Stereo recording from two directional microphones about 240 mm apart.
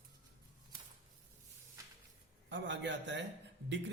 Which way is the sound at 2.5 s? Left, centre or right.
Right.